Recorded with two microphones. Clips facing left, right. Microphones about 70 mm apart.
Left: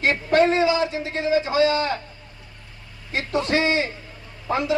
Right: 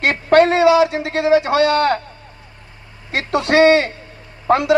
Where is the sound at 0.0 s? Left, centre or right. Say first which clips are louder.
Right 5 dB; right.